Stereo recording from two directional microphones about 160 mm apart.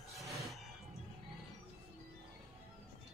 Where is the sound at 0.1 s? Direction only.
Centre (ahead or behind).